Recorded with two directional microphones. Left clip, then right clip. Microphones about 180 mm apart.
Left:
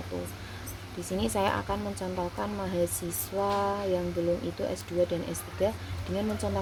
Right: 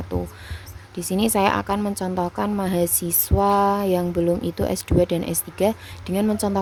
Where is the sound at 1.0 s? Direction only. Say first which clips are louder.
Right 9 dB; 35° right (ahead or behind).